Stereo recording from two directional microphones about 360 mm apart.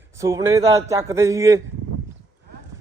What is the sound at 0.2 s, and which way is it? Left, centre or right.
A man's voice, centre.